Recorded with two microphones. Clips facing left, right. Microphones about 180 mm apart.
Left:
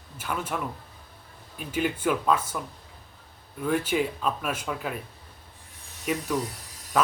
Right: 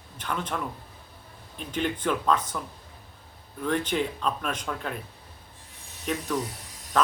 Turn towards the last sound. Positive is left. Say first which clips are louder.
# even
turn(degrees=5)  # may be behind; listen again after turning